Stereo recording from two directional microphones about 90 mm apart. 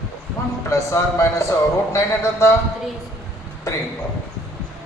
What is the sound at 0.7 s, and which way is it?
Speech, 35° left (ahead or behind).